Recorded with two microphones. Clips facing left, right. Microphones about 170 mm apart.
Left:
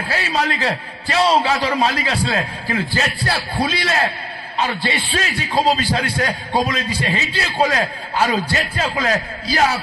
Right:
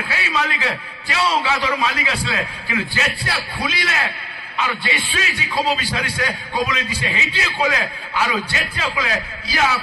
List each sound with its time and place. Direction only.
0.1 s a man's voice: 35° left (ahead or behind)